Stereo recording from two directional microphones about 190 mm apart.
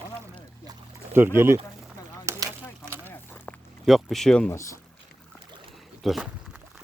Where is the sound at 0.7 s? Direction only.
10° right (ahead or behind).